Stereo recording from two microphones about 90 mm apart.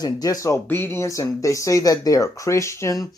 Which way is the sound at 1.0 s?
35° left (ahead or behind).